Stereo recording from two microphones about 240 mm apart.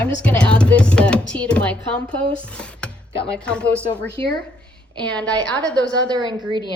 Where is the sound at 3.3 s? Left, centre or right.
Centre.